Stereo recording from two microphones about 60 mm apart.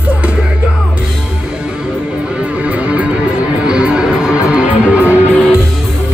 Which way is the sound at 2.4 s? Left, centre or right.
Right.